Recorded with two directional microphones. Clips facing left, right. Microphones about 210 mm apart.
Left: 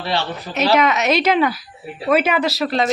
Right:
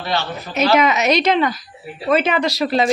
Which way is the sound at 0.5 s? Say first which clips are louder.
Right 1 dB; centre (ahead or behind).